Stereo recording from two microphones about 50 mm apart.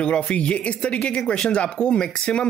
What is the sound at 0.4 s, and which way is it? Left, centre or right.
Speech, left.